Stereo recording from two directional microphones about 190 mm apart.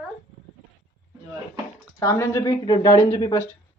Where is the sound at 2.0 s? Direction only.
15° left (ahead or behind).